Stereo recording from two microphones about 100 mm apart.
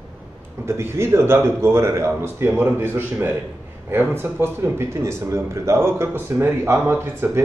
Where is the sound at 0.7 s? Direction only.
25° right (ahead or behind).